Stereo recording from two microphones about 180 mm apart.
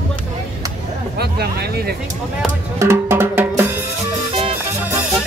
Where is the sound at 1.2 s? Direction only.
60° right (ahead or behind).